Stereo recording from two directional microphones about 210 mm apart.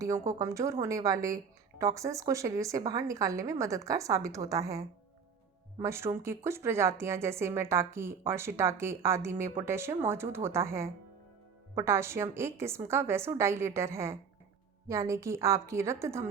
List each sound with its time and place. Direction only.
0.0 s a woman's voice: 15° right (ahead or behind)